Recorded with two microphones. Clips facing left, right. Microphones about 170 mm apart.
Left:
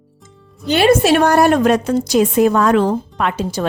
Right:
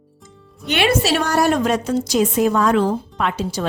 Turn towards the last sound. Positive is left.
turn(degrees=55)  # may be behind; listen again after turning